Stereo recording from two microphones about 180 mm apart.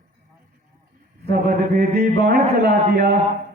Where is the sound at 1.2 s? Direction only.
55° right (ahead or behind).